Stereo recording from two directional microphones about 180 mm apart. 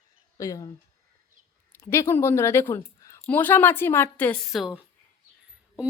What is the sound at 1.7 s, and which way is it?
A woman's voice, 15° left (ahead or behind).